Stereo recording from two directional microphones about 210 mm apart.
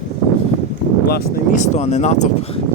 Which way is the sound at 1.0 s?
50° left (ahead or behind).